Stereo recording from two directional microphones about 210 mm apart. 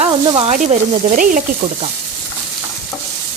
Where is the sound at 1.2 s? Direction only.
40° right (ahead or behind).